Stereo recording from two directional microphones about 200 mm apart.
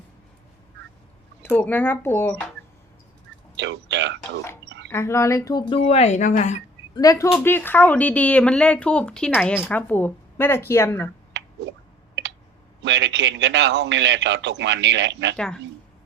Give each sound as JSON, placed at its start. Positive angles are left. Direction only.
{"t": 1.4, "sound": "speech", "side_deg": 10}
{"t": 3.6, "sound": "a sound", "side_deg": -60}
{"t": 4.9, "sound": "speech", "side_deg": 15}
{"t": 6.9, "sound": "speech", "side_deg": 15}
{"t": 11.3, "sound": "finger snapping", "side_deg": -60}
{"t": 12.8, "sound": "a man's voice", "side_deg": -65}
{"t": 15.4, "sound": "a woman's voice", "side_deg": 5}